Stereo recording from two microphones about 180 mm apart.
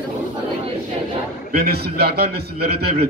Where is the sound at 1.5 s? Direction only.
60° right (ahead or behind).